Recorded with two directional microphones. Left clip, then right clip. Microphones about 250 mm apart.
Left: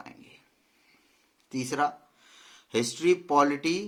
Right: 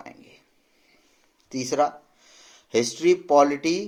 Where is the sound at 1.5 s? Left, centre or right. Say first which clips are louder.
Right 5 dB; centre.